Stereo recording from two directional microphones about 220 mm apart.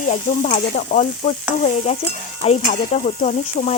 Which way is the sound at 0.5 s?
30° left (ahead or behind).